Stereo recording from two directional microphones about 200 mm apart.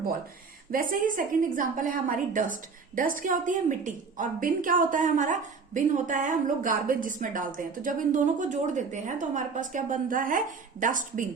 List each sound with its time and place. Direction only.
0.7 s a woman's voice: 45° right (ahead or behind)